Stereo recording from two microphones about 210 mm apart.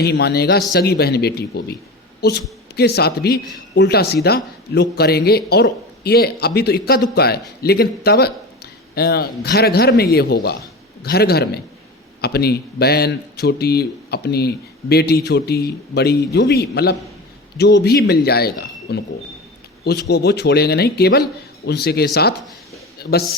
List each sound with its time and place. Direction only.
0.0 s a man's voice: 50° left (ahead or behind)